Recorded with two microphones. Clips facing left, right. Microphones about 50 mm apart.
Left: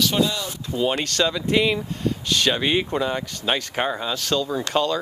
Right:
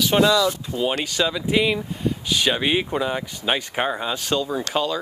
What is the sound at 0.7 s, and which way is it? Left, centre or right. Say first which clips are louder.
Speech: left 1 dB; centre.